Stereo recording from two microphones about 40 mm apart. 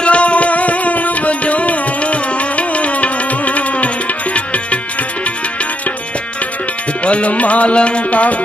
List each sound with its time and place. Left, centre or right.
0.0 s music: left
7.1 s music: left